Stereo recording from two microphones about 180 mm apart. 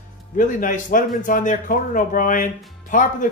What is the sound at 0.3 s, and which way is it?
Speech, 45° left (ahead or behind).